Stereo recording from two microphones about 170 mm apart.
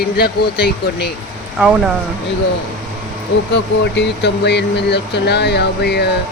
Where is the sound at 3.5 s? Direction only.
90° left.